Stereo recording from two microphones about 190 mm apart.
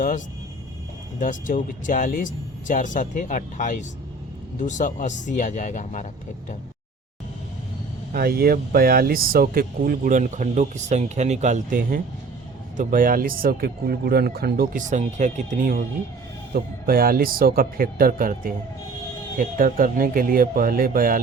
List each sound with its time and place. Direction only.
1.2 s speech: 45° left (ahead or behind)
8.1 s speech: 55° right (ahead or behind)